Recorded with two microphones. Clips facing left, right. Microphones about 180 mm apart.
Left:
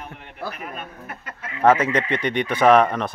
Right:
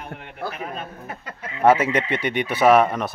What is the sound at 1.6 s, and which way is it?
Speech, 10° right (ahead or behind).